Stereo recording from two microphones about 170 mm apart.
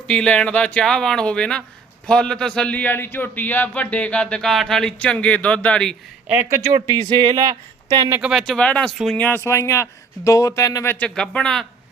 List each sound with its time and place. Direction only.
0.1 s speech: 5° left (ahead or behind)
6.2 s speech: 10° right (ahead or behind)
6.7 s speech: 25° right (ahead or behind)
8.2 s speech: centre (ahead or behind); by 10.9 s 20° left (ahead or behind)
11.0 s speech: 5° left (ahead or behind)